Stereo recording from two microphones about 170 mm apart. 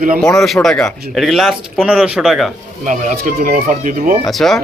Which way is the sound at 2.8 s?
50° right (ahead or behind).